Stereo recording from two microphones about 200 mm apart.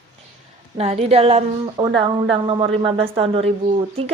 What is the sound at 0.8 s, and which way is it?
A woman's voice, 30° right (ahead or behind).